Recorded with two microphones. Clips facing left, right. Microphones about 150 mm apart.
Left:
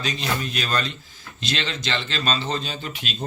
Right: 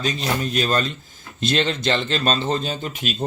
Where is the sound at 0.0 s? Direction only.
40° right (ahead or behind).